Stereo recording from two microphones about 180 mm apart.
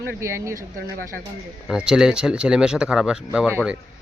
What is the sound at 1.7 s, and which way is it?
Speech, 5° right (ahead or behind).